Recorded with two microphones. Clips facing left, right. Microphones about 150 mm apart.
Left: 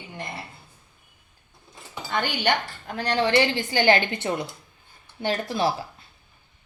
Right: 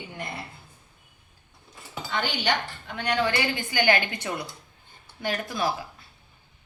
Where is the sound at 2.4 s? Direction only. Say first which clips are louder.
Left 3 dB; 40° left (ahead or behind).